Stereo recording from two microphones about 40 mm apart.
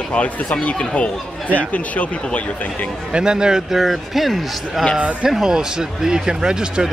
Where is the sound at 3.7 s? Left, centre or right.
Centre.